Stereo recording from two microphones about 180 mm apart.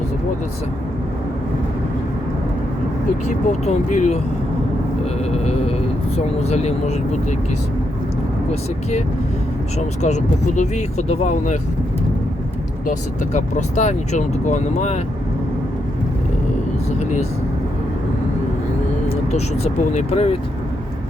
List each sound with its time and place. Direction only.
3.2 s speech: 40° left (ahead or behind)
5.3 s speech: 35° left (ahead or behind)
9.7 s speech: 40° left (ahead or behind)
13.3 s speech: 40° left (ahead or behind)
17.0 s speech: 40° left (ahead or behind)
19.3 s speech: 40° left (ahead or behind)